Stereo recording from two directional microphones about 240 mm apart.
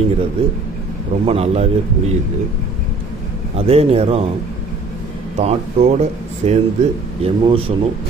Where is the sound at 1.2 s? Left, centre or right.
Right.